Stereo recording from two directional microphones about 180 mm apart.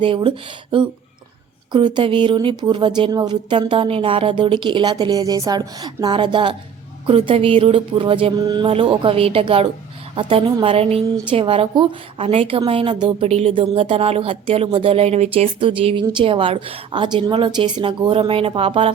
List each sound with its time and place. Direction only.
0.0 s a woman's voice: 30° right (ahead or behind)